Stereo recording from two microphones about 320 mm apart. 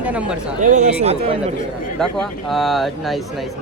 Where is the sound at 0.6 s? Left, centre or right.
Right.